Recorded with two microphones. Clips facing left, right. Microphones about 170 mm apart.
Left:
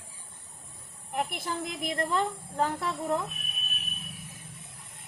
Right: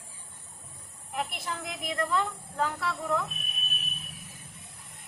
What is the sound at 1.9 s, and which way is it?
Speech, 45° left (ahead or behind).